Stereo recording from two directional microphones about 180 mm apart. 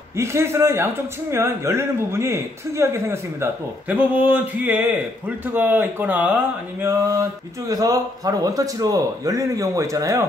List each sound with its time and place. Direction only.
0.2 s a man's voice: 15° right (ahead or behind)